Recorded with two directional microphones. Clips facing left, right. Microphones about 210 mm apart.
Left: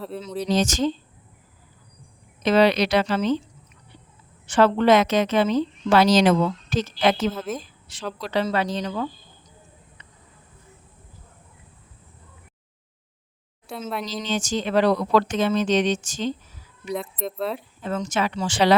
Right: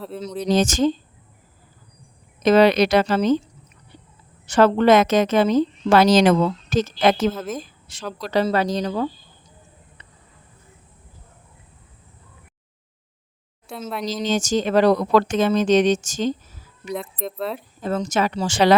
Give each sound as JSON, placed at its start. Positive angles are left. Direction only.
{"t": 0.4, "sound": "speech", "side_deg": -50}
{"t": 2.4, "sound": "speech", "side_deg": -45}
{"t": 4.4, "sound": "speech", "side_deg": -45}
{"t": 7.3, "sound": "speech", "side_deg": 0}
{"t": 8.2, "sound": "a woman's voice", "side_deg": -40}
{"t": 13.7, "sound": "speech", "side_deg": 0}
{"t": 14.1, "sound": "speech", "side_deg": -45}
{"t": 16.9, "sound": "speech", "side_deg": 0}
{"t": 17.7, "sound": "a woman's voice", "side_deg": -40}